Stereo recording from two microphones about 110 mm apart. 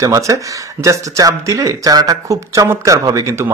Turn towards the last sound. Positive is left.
turn(degrees=-30)  # may be behind; listen again after turning